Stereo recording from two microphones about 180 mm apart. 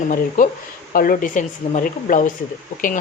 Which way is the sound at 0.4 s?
45° left (ahead or behind).